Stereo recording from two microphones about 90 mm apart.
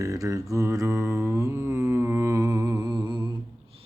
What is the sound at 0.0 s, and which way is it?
Mantra, 40° right (ahead or behind).